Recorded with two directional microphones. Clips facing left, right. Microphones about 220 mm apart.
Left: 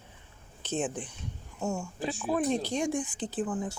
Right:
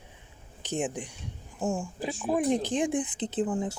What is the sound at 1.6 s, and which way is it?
Speech, 30° right (ahead or behind).